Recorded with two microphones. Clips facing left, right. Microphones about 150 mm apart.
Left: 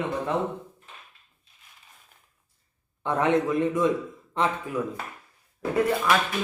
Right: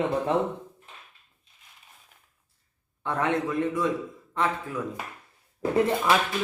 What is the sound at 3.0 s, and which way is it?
A man's voice, 20° left (ahead or behind).